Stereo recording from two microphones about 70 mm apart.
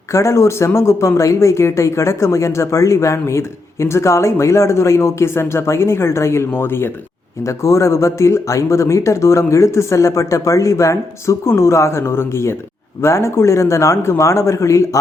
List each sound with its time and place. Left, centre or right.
0.1 s speech: left
7.4 s speech: left